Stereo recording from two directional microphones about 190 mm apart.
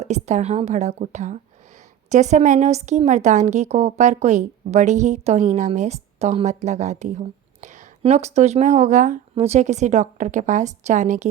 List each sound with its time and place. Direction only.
0.0 s a woman's voice: 35° right (ahead or behind)